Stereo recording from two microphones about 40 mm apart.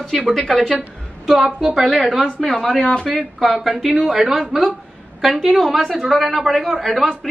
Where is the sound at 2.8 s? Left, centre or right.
Left.